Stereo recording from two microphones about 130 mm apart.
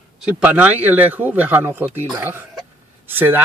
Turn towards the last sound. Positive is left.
turn(degrees=-15)  # may be behind; listen again after turning